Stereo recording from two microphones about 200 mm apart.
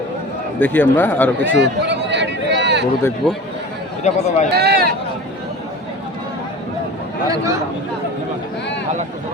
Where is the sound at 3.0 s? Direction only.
10° left (ahead or behind).